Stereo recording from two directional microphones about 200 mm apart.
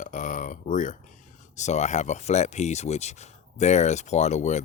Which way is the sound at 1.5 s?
35° left (ahead or behind).